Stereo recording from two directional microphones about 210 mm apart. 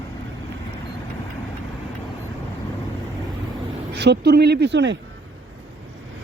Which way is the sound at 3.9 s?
50° right (ahead or behind).